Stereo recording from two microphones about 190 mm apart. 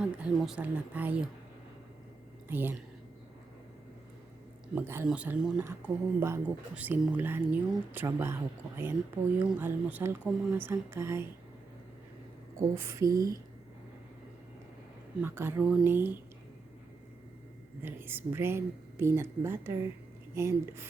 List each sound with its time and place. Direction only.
0.0 s speech: 5° right (ahead or behind)
2.5 s speech: 10° right (ahead or behind)
4.7 s speech: 15° right (ahead or behind)
9.4 s speech: 10° right (ahead or behind)
12.5 s speech: 15° right (ahead or behind)
15.2 s speech: 10° right (ahead or behind)
17.8 s speech: 10° right (ahead or behind)